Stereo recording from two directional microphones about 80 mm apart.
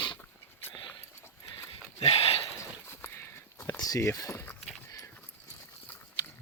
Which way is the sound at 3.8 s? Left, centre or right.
Left.